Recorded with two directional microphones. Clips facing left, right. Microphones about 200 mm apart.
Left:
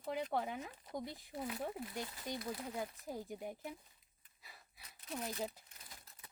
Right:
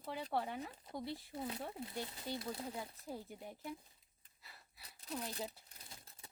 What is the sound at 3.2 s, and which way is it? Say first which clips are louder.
Speech: left 6 dB; 15° left (ahead or behind).